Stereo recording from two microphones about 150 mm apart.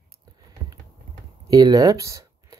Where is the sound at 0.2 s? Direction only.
25° right (ahead or behind).